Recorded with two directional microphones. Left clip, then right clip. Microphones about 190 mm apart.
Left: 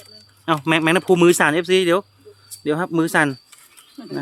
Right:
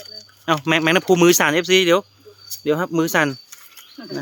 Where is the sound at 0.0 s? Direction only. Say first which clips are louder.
Right 1 dB; centre (ahead or behind).